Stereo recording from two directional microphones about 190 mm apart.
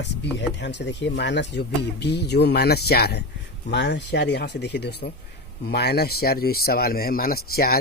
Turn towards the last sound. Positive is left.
turn(degrees=55)  # may be behind; listen again after turning